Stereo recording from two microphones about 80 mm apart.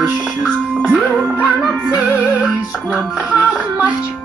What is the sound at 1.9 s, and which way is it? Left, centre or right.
Music, centre.